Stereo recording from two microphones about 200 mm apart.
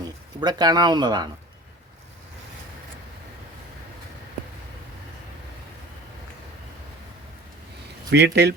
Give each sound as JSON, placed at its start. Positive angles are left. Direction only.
{"t": 0.3, "sound": "speech", "side_deg": -20}
{"t": 8.1, "sound": "speech", "side_deg": -55}